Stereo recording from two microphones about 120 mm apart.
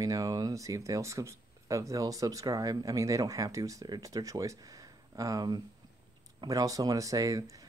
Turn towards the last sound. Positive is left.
turn(degrees=-30)  # may be behind; listen again after turning